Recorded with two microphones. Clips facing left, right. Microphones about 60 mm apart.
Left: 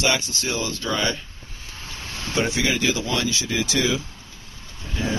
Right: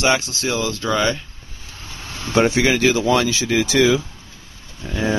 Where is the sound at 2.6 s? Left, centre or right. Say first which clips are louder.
Right 6 dB; right.